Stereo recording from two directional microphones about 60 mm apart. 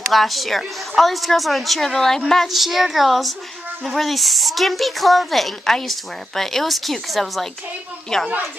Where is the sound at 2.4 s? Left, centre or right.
Centre.